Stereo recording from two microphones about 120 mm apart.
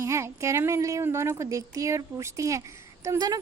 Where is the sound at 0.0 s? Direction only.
25° right (ahead or behind).